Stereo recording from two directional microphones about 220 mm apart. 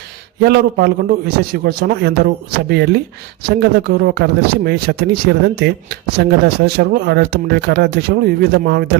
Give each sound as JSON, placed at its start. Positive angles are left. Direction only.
{"t": 0.3, "sound": "speech", "side_deg": -45}